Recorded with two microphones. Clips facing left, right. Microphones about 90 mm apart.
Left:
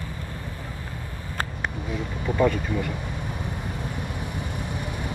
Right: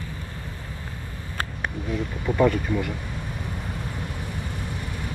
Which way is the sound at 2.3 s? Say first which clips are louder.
Right 2 dB; 20° left (ahead or behind).